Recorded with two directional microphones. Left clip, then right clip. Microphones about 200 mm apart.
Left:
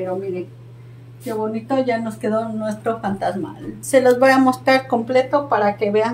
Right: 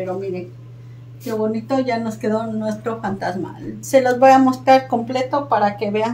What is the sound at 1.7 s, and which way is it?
Speech, 10° left (ahead or behind).